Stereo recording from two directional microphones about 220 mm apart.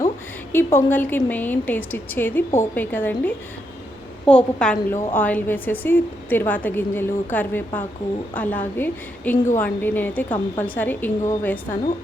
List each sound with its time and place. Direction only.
0.5 s a woman's voice: 10° left (ahead or behind)